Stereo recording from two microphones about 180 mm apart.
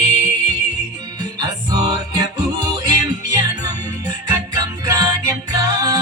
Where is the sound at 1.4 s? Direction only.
20° right (ahead or behind).